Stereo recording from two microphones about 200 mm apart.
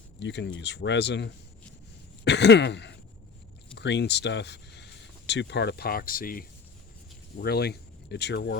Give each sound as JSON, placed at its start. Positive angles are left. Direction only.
{"t": 0.2, "sound": "speech", "side_deg": 60}
{"t": 2.2, "sound": "throat clearing", "side_deg": 60}
{"t": 3.8, "sound": "speech", "side_deg": 60}